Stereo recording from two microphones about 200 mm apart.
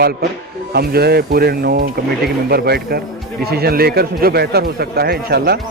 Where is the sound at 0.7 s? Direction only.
50° right (ahead or behind).